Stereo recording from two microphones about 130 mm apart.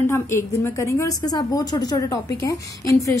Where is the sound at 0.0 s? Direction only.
20° left (ahead or behind).